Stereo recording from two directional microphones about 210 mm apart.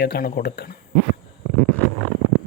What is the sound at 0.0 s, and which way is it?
Speech, 50° left (ahead or behind).